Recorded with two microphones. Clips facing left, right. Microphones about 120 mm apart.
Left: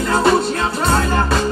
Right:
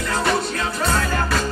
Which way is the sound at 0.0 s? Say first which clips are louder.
Left 7 dB; 30° left (ahead or behind).